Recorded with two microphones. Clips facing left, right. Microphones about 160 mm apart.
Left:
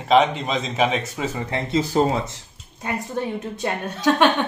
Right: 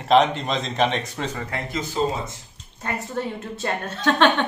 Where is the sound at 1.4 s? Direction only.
25° left (ahead or behind).